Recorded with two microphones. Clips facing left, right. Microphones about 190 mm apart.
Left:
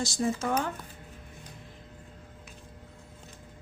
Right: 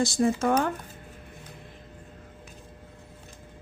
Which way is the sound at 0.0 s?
55° right (ahead or behind).